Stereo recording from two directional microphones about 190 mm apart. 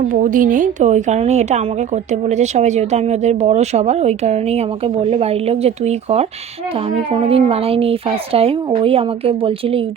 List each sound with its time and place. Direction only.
0.1 s speech: 45° right (ahead or behind); by 9.8 s 30° right (ahead or behind)